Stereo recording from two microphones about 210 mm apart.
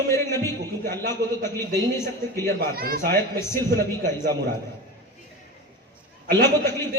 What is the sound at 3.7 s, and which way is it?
Speech, 10° left (ahead or behind).